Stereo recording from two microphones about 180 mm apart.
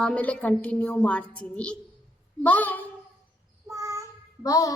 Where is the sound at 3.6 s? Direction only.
15° right (ahead or behind).